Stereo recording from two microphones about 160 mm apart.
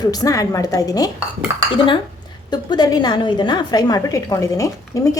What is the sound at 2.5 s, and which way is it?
A woman's voice, 25° left (ahead or behind).